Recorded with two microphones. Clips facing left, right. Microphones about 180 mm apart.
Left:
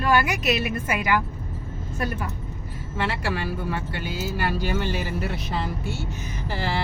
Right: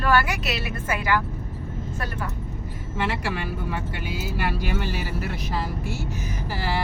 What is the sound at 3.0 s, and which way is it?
Speech, 15° right (ahead or behind).